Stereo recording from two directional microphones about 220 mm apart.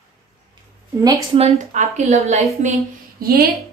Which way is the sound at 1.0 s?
15° right (ahead or behind).